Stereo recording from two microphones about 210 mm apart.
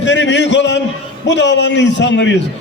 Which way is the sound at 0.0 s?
60° left (ahead or behind).